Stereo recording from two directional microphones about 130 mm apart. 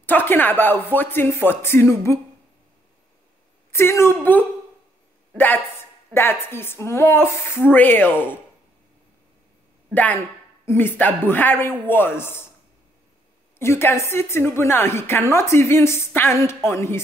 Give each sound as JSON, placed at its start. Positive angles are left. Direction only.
{"t": 0.0, "sound": "speech", "side_deg": 15}
{"t": 3.7, "sound": "a woman's voice", "side_deg": 20}
{"t": 6.1, "sound": "speech", "side_deg": 15}
{"t": 10.6, "sound": "speech", "side_deg": 20}
{"t": 13.6, "sound": "a woman's voice", "side_deg": 20}